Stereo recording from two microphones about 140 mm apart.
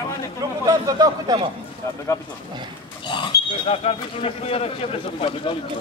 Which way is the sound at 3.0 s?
35° left (ahead or behind).